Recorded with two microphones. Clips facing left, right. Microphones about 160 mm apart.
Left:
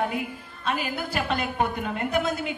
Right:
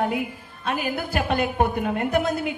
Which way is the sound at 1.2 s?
50° right (ahead or behind).